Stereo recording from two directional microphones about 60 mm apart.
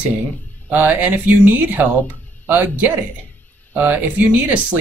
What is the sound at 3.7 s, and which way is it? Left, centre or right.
Speech, right.